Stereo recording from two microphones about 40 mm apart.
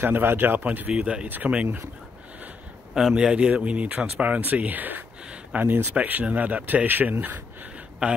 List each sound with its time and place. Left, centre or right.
0.0 s a man's voice: right
0.7 s speech: right
0.9 s speech: right
1.2 s speech: right
2.9 s speech: centre
3.3 s speech: right
8.0 s speech: right